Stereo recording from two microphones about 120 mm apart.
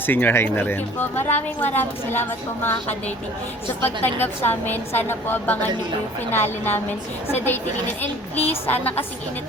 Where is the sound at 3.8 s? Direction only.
20° left (ahead or behind).